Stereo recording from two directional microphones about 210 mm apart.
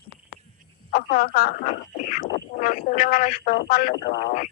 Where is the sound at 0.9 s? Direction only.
45° left (ahead or behind).